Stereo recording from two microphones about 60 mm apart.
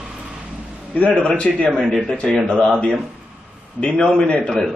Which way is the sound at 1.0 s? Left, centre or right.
Centre.